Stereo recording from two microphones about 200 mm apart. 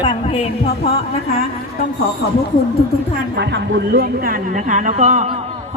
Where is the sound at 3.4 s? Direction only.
55° right (ahead or behind); by 5.3 s 35° right (ahead or behind).